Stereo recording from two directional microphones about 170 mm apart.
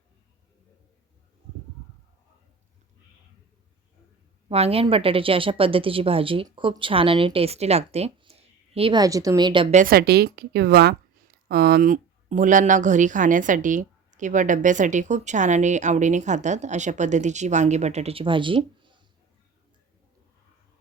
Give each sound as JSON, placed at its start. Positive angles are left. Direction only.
{"t": 4.4, "sound": "speech", "side_deg": -35}
{"t": 9.7, "sound": "a woman's voice", "side_deg": -60}